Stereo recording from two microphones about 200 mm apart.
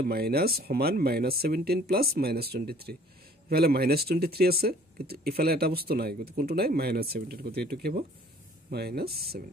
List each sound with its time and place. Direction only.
0.0 s speech: 50° right (ahead or behind)